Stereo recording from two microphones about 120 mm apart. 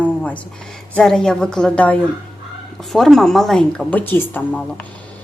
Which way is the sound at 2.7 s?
Centre (ahead or behind).